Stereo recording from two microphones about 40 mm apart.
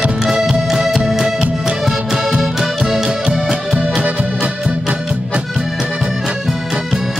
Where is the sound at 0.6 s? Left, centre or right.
Centre.